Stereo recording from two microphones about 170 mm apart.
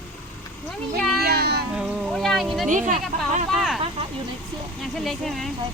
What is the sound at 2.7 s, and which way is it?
Speech, 50° right (ahead or behind).